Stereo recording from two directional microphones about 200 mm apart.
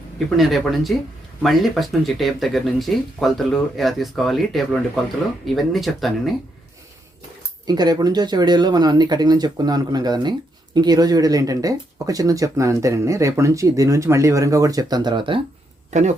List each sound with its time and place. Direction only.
0.3 s speech: centre (ahead or behind)
7.7 s speech: 20° right (ahead or behind)
15.9 s speech: 35° right (ahead or behind)